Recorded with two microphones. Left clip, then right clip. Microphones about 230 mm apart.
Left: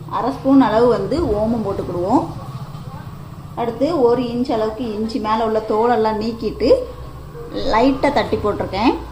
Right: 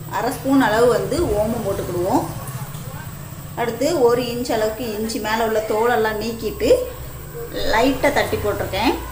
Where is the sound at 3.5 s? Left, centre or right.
Centre.